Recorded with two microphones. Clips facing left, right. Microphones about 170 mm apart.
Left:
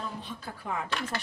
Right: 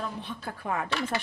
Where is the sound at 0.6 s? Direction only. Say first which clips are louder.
Right 3 dB; 60° right (ahead or behind).